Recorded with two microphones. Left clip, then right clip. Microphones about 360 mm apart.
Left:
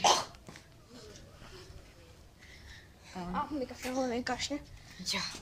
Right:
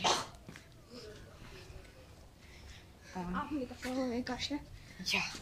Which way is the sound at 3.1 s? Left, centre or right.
Centre.